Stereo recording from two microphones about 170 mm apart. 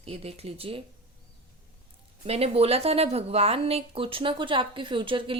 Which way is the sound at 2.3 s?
35° right (ahead or behind).